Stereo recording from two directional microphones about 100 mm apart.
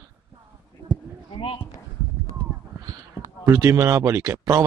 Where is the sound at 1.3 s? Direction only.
60° left (ahead or behind).